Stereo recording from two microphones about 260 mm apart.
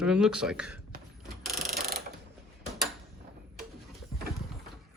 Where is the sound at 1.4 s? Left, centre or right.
Centre.